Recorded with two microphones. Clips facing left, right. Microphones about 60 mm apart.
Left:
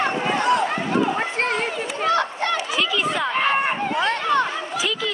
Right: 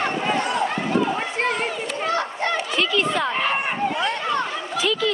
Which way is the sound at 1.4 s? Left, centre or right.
Left.